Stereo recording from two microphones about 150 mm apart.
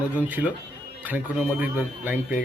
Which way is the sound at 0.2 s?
10° right (ahead or behind).